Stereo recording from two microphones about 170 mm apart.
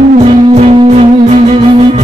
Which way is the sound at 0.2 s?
40° right (ahead or behind).